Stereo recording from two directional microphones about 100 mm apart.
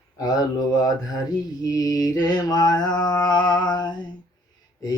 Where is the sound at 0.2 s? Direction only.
40° left (ahead or behind).